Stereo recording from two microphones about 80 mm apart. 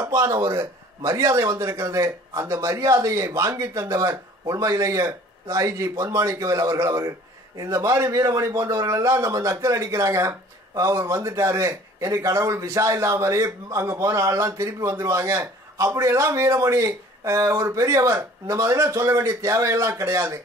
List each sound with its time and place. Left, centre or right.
0.0 s speech: right